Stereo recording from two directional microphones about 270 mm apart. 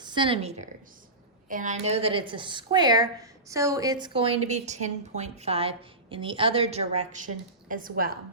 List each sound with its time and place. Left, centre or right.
0.0 s a woman's voice: centre; by 8.1 s right